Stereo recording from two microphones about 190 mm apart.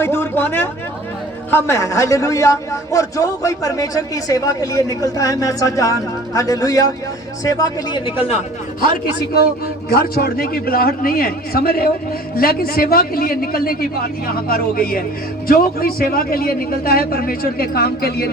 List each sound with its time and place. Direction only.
0.0 s a man's voice: 15° left (ahead or behind)
9.9 s a man's voice: 55° left (ahead or behind)